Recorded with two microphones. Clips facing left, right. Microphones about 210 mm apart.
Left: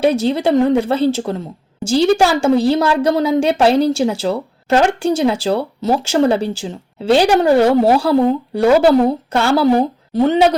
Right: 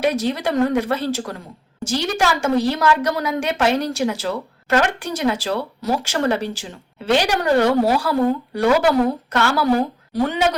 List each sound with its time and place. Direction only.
0.0 s a woman's voice: 30° left (ahead or behind)